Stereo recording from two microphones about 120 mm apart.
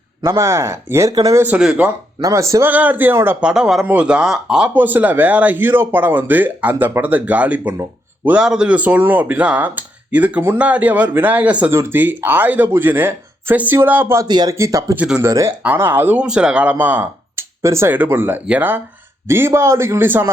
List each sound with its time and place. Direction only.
0.3 s a man's voice: 25° right (ahead or behind)
1.5 s speech: 10° right (ahead or behind)
2.2 s a man's voice: 25° right (ahead or behind)
2.6 s speech: 15° right (ahead or behind)
3.5 s speech: 5° right (ahead or behind); by 14.3 s 20° right (ahead or behind)
14.3 s speech: 35° right (ahead or behind)
14.5 s a man's voice: 25° right (ahead or behind)
14.9 s speech: 10° right (ahead or behind)
15.2 s a man's voice: 25° right (ahead or behind)
16.2 s a man's voice: 5° right (ahead or behind)